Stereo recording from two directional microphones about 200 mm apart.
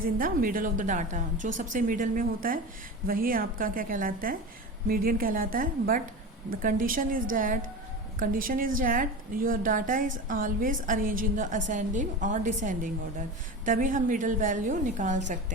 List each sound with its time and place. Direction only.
0.0 s a woman's voice: 45° right (ahead or behind)